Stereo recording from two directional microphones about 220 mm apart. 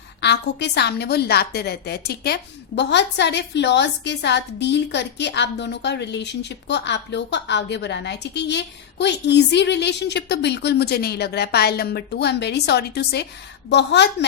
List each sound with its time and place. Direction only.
0.2 s a woman's voice: 50° left (ahead or behind)